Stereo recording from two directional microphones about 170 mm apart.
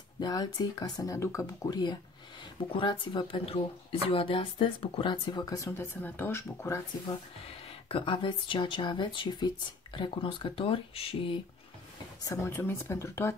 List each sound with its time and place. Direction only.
0.2 s speech: 20° left (ahead or behind)
7.4 s speech: 30° left (ahead or behind)
12.3 s speech: 15° left (ahead or behind)